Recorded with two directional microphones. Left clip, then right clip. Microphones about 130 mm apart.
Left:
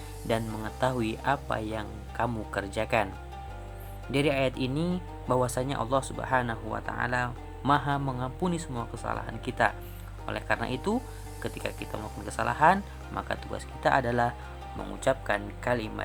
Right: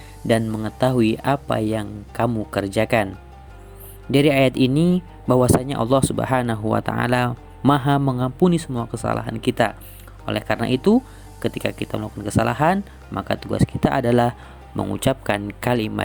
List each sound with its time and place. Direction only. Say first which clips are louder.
0.6 s speech: right 9 dB; 45° right (ahead or behind)
4.1 s speech: right 10 dB; 55° right (ahead or behind)